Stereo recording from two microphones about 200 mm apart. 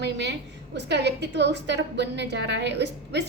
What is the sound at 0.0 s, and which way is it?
A woman's voice, 60° right (ahead or behind).